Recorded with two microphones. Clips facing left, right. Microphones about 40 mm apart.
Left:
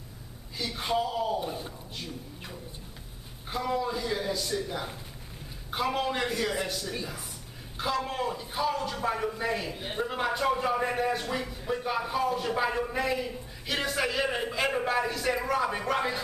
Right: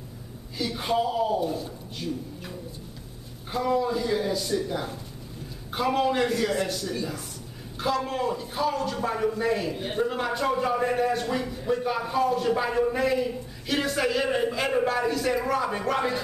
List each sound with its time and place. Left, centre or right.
0.6 s a man's voice: centre
1.4 s a man's voice: left
2.0 s a man's voice: centre